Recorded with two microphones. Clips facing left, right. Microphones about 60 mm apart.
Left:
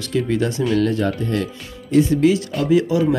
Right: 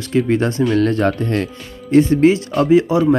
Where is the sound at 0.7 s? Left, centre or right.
Right.